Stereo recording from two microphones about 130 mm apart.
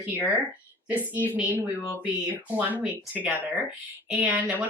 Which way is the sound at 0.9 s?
15° right (ahead or behind).